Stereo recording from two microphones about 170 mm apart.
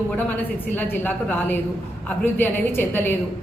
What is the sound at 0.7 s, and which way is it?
A woman's voice, 10° left (ahead or behind).